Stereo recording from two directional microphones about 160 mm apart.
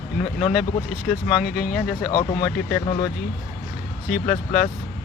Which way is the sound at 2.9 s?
45° left (ahead or behind).